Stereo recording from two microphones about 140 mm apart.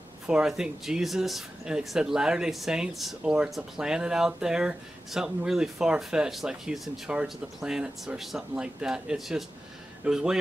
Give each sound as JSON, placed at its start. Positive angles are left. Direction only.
{"t": 0.3, "sound": "speech", "side_deg": -5}